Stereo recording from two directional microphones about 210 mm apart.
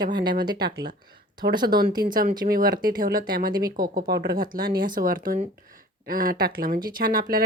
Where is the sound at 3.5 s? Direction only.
20° right (ahead or behind).